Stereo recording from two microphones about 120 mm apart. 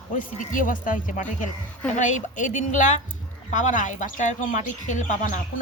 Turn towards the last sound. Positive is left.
turn(degrees=90)